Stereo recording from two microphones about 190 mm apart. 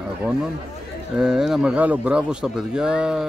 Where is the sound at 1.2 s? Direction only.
5° right (ahead or behind).